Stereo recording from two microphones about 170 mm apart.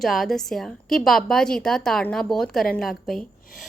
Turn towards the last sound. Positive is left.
turn(degrees=0)  # may be behind; listen again after turning